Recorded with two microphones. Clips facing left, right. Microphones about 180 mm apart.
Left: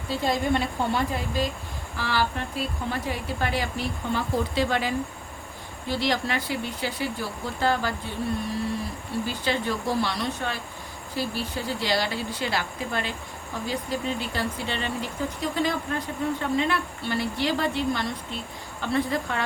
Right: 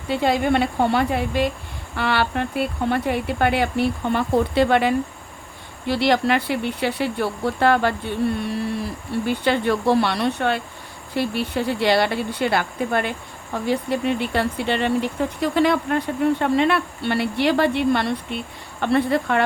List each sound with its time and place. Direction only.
0.1 s speech: 65° right (ahead or behind)
9.2 s speech: 60° right (ahead or behind)